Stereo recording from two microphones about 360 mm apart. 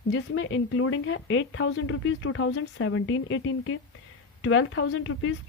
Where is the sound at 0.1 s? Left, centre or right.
Left.